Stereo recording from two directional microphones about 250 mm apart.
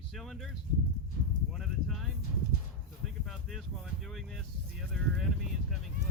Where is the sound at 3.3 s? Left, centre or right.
Centre.